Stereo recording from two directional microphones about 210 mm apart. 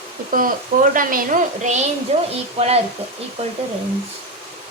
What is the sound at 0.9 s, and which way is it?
Speech, 40° right (ahead or behind).